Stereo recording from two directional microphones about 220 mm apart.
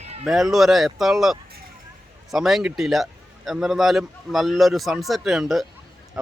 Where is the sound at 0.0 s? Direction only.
30° right (ahead or behind).